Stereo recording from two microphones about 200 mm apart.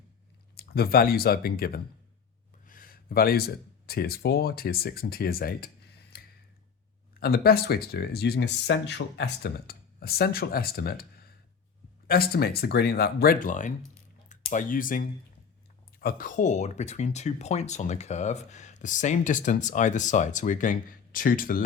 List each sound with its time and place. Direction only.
0.5 s speech: 50° left (ahead or behind)
12.0 s speech: 50° left (ahead or behind)